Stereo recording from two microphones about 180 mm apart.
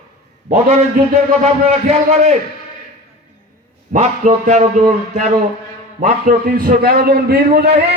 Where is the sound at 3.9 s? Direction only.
45° right (ahead or behind); by 7.7 s 60° right (ahead or behind).